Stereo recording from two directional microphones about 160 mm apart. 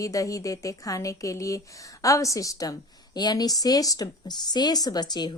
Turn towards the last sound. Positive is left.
turn(degrees=25)  # may be behind; listen again after turning